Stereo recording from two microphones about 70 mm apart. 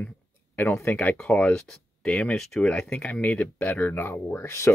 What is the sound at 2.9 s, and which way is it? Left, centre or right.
Speech, left.